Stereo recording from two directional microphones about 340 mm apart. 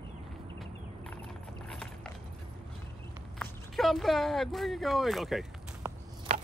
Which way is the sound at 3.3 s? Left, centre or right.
Centre.